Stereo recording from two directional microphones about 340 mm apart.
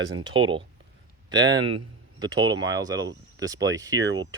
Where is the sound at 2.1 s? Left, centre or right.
Centre.